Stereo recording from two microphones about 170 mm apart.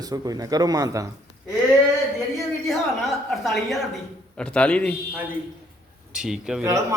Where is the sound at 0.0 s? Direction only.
20° right (ahead or behind).